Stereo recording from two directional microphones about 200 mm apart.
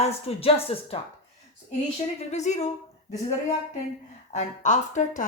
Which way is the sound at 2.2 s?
35° left (ahead or behind).